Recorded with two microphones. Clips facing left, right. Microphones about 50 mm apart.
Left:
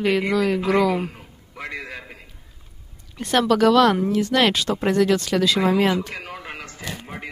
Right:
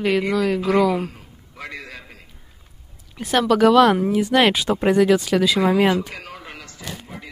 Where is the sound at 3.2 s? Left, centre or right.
Centre.